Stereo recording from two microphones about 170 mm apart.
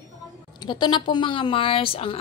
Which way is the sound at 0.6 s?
25° left (ahead or behind).